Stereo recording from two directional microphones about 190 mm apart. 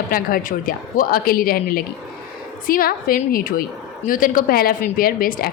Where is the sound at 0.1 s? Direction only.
50° left (ahead or behind).